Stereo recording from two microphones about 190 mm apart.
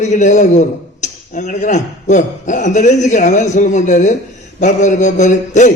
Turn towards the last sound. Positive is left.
turn(degrees=40)  # may be behind; listen again after turning